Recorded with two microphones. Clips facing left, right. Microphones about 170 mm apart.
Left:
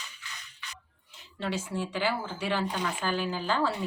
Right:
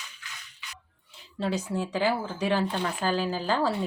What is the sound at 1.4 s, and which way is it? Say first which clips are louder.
A woman's voice: right 3 dB; 35° right (ahead or behind).